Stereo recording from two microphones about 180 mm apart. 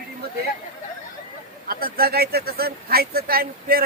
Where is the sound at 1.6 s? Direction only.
55° right (ahead or behind).